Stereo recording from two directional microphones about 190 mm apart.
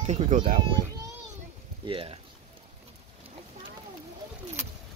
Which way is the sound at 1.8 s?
30° right (ahead or behind).